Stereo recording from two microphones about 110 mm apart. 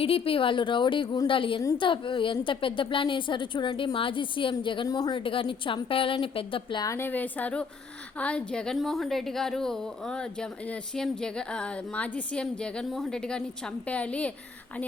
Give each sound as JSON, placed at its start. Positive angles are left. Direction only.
{"t": 0.0, "sound": "a woman's voice", "side_deg": 55}
{"t": 5.2, "sound": "a woman's voice", "side_deg": 50}
{"t": 6.8, "sound": "a woman's voice", "side_deg": 25}